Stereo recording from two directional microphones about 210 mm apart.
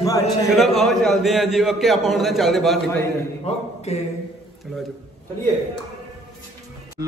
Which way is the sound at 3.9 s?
30° left (ahead or behind).